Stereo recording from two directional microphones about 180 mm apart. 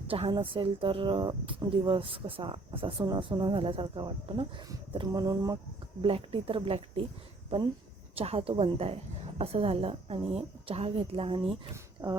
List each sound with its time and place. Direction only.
0.1 s speech: 30° right (ahead or behind)
6.0 s a woman's voice: 30° right (ahead or behind)
8.1 s a woman's voice: 35° right (ahead or behind)